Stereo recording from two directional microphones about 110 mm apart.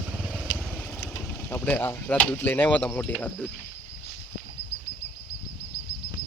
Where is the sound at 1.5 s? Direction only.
15° left (ahead or behind).